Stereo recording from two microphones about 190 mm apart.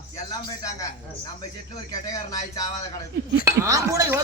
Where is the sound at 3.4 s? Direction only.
15° right (ahead or behind).